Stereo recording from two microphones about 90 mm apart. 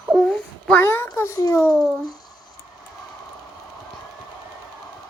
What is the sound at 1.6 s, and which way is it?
Speech, 5° left (ahead or behind).